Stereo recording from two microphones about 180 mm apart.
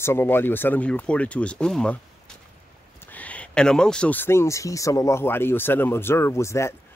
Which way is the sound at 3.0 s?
10° left (ahead or behind).